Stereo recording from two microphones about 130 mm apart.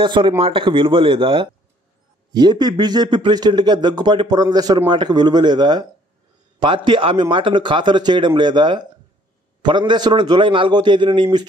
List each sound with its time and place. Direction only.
0.0 s a man's voice: 40° right (ahead or behind)